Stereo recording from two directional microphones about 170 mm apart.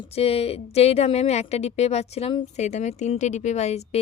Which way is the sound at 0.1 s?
35° left (ahead or behind).